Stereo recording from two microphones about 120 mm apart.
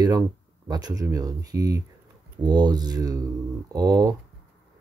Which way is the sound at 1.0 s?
30° right (ahead or behind).